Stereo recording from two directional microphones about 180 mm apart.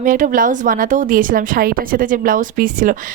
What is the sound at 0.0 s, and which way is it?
A woman's voice, 50° right (ahead or behind).